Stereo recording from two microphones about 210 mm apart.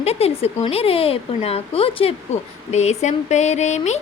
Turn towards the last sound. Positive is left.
turn(degrees=35)  # may be behind; listen again after turning